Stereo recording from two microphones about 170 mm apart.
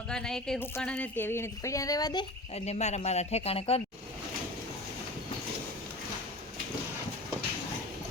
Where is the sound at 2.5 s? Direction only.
40° left (ahead or behind).